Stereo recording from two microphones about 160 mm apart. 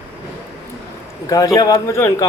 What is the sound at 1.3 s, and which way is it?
Speech, 20° left (ahead or behind).